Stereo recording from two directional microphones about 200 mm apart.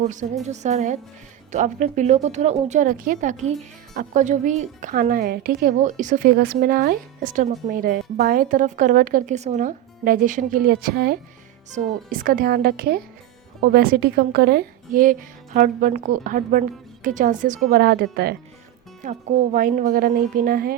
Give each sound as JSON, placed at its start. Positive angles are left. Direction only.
{"t": 0.0, "sound": "a woman's voice", "side_deg": -40}
{"t": 11.7, "sound": "a woman's voice", "side_deg": -35}